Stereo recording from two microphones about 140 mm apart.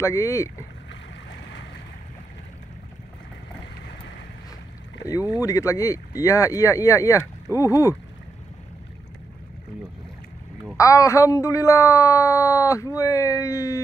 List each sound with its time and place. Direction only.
0.0 s speech: 20° left (ahead or behind)
5.4 s speech: 25° left (ahead or behind)
10.8 s speech: 25° left (ahead or behind)